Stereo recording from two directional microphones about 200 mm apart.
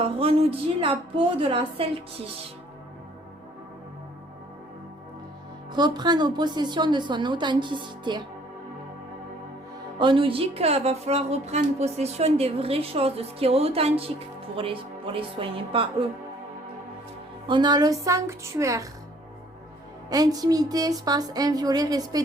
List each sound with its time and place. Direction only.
0.0 s a woman's voice: 30° right (ahead or behind)
5.7 s a woman's voice: 20° right (ahead or behind)
10.0 s a woman's voice: 25° right (ahead or behind)
17.5 s a woman's voice: 20° right (ahead or behind)
20.1 s a woman's voice: 20° right (ahead or behind)